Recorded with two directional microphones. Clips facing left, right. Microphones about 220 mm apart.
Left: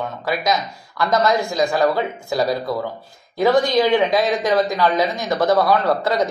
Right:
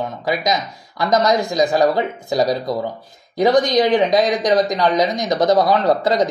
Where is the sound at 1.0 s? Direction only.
20° right (ahead or behind).